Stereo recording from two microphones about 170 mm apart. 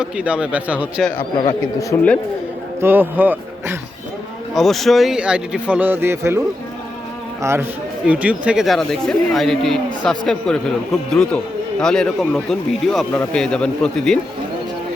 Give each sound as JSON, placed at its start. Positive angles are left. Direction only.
{"t": 0.0, "sound": "speech", "side_deg": -5}
{"t": 1.9, "sound": "speech", "side_deg": 20}
{"t": 2.8, "sound": "speech", "side_deg": -10}
{"t": 4.5, "sound": "speech", "side_deg": 0}
{"t": 8.0, "sound": "speech", "side_deg": -10}